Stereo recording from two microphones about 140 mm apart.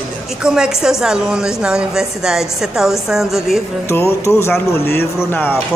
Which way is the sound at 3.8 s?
20° left (ahead or behind).